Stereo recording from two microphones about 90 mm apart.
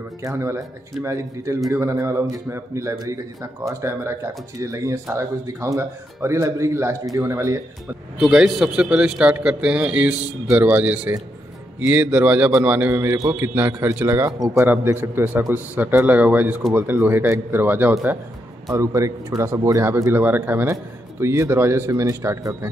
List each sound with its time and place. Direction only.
1.0 s speech: 35° right (ahead or behind)
8.2 s a man's voice: 5° right (ahead or behind)
12.9 s a man's voice: 30° right (ahead or behind)
18.7 s speech: 35° right (ahead or behind)